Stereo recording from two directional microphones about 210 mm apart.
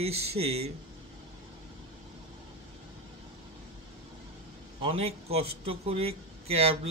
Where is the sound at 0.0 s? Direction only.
30° right (ahead or behind).